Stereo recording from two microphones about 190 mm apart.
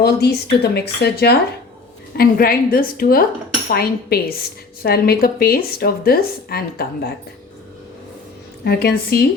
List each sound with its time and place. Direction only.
0.0 s speech: 60° left (ahead or behind)
8.6 s speech: 55° left (ahead or behind)